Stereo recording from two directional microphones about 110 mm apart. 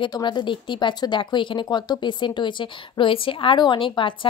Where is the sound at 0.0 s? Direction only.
45° left (ahead or behind).